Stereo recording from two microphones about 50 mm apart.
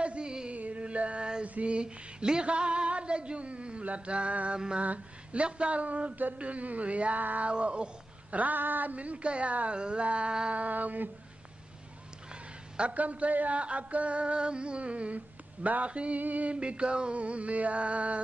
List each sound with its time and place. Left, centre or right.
0.0 s music: right
1.5 s speech: right
4.6 s mantra: centre
4.8 s speech: right
12.7 s speech: right
16.2 s a sound: right
16.5 s speech: right